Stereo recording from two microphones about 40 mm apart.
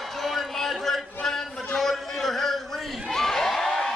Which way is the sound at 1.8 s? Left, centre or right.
Centre.